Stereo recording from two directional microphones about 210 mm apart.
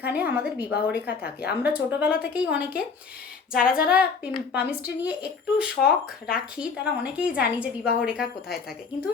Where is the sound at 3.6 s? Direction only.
45° left (ahead or behind).